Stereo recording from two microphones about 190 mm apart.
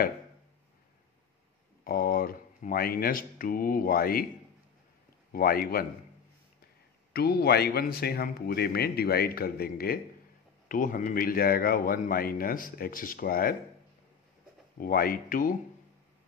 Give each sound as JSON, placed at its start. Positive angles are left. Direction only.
{"t": 1.9, "sound": "speech", "side_deg": 50}
{"t": 5.3, "sound": "speech", "side_deg": 50}
{"t": 7.1, "sound": "a man's voice", "side_deg": 55}
{"t": 14.8, "sound": "speech", "side_deg": 50}